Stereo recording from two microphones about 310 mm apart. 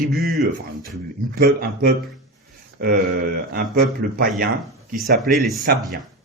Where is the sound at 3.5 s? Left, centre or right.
Right.